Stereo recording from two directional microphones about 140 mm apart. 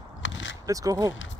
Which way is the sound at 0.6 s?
25° right (ahead or behind).